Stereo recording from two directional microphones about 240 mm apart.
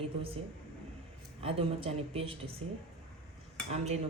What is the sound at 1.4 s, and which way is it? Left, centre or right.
Speech, right.